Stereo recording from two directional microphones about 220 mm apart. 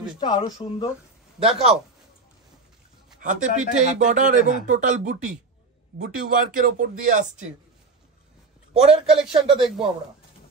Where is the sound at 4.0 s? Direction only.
35° right (ahead or behind).